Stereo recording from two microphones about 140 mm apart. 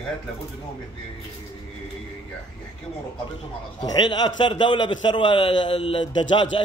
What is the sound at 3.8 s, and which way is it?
A man's voice, 30° left (ahead or behind).